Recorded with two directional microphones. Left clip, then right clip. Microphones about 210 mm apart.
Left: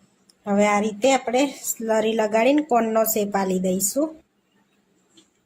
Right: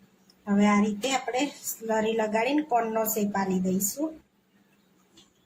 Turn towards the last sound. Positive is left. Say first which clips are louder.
# left 6 dB
turn(degrees=50)  # may be behind; listen again after turning